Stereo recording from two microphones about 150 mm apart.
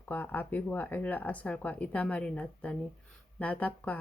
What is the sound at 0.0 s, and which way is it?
Speech, 10° left (ahead or behind).